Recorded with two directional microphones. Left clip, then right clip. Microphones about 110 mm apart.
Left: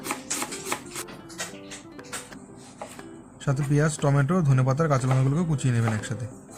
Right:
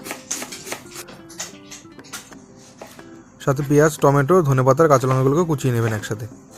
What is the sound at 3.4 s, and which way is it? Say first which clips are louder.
Speech: right 10 dB; 45° right (ahead or behind).